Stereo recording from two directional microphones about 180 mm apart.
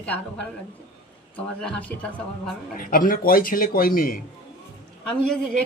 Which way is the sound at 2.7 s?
50° left (ahead or behind).